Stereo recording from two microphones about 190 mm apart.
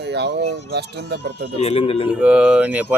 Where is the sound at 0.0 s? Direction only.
60° right (ahead or behind).